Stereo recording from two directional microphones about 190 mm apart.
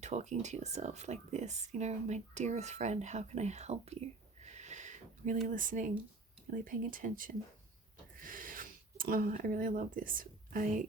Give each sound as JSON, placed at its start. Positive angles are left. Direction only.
{"t": 0.0, "sound": "speech", "side_deg": -35}
{"t": 4.4, "sound": "a sound", "side_deg": -35}
{"t": 5.5, "sound": "speech", "side_deg": -45}